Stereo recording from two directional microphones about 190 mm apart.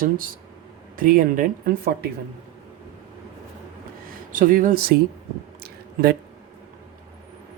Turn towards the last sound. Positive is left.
turn(degrees=-55)  # may be behind; listen again after turning